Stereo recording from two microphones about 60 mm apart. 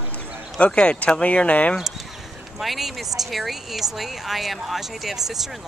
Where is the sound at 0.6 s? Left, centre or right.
Centre.